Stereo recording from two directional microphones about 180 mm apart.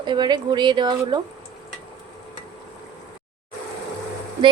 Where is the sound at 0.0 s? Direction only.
25° right (ahead or behind).